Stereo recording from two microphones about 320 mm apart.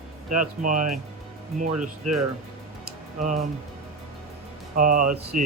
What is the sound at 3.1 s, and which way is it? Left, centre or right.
Speech, right.